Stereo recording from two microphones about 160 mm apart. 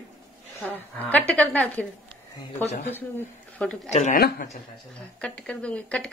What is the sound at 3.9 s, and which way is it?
Speech, 45° left (ahead or behind).